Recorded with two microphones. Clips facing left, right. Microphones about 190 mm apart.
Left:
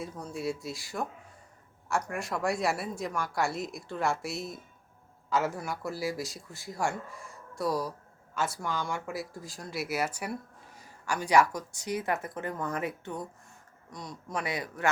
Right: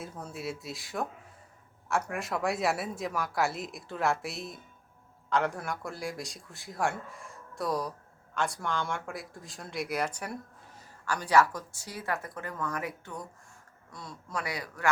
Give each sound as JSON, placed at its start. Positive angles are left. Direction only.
{"t": 0.0, "sound": "speech", "side_deg": 0}